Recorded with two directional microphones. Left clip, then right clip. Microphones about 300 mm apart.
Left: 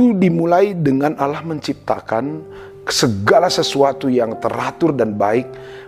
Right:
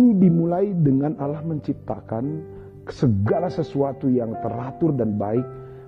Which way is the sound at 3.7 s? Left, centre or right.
Centre.